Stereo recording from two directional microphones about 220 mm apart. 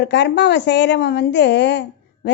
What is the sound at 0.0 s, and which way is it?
A woman's voice, 50° left (ahead or behind).